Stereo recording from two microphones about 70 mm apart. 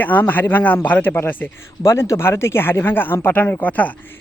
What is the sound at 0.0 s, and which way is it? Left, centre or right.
Speech, left.